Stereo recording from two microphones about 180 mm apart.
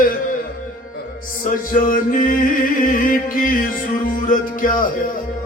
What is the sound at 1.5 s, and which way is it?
Music, 50° left (ahead or behind).